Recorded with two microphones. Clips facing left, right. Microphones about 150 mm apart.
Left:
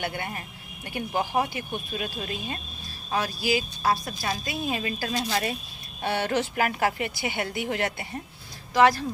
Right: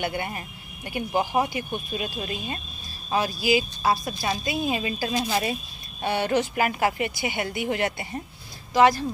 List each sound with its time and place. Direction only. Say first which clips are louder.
0.0 s a woman's voice: right 3 dB; 15° right (ahead or behind)